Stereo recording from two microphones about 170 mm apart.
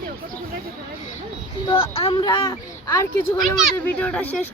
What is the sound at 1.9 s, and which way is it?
Speech, 35° left (ahead or behind).